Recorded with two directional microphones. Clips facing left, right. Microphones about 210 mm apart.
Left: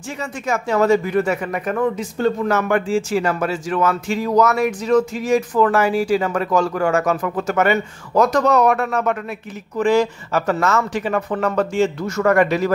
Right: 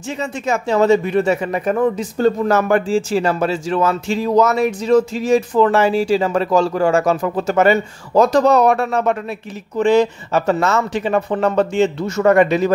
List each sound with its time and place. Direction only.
0.2 s speech: 25° right (ahead or behind)